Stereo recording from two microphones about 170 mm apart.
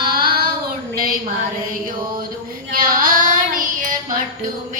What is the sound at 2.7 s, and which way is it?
Child singing, 55° right (ahead or behind).